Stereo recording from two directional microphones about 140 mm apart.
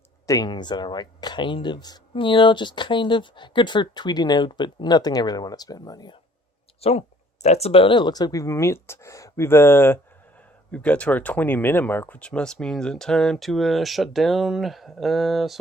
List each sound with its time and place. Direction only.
0.3 s speech: 30° left (ahead or behind)
6.8 s speech: 45° left (ahead or behind); by 15.5 s centre (ahead or behind)